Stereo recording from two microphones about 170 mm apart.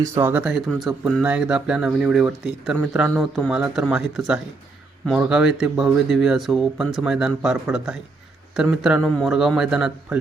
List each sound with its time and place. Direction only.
0.0 s speech: 15° right (ahead or behind)